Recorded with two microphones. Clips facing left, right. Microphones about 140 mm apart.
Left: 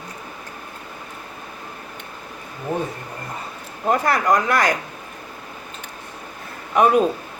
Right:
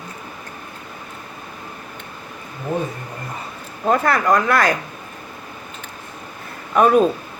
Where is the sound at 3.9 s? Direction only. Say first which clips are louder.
Right 2 dB; 15° left (ahead or behind).